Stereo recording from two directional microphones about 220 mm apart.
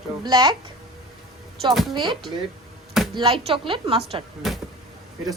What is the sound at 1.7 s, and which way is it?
Speech, centre (ahead or behind).